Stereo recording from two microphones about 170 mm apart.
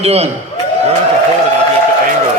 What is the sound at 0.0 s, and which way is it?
Speech, 40° right (ahead or behind).